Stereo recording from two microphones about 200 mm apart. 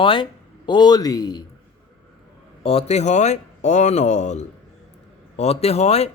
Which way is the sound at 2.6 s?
30° left (ahead or behind).